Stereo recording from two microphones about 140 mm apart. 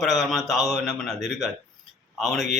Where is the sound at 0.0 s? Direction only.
Centre (ahead or behind).